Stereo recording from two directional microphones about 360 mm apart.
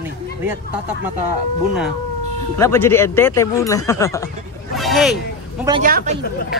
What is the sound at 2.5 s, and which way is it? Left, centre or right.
Speech, centre.